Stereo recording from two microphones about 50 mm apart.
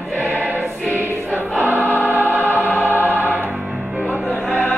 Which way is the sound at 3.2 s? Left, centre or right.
Right.